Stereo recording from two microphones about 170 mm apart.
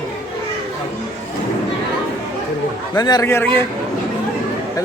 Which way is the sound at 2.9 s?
25° left (ahead or behind).